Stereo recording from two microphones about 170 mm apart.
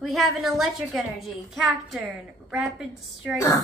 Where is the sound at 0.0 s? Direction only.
Centre (ahead or behind).